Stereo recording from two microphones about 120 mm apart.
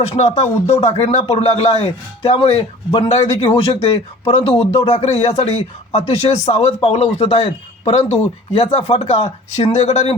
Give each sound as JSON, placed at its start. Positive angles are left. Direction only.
{"t": 0.3, "sound": "speech", "side_deg": 60}